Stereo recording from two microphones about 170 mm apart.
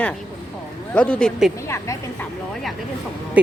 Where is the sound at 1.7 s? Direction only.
15° left (ahead or behind).